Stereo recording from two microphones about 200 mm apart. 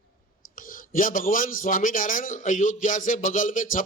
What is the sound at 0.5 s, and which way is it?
A man's voice, 45° left (ahead or behind).